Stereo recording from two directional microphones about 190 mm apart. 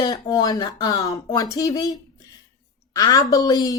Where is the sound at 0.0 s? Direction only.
20° left (ahead or behind).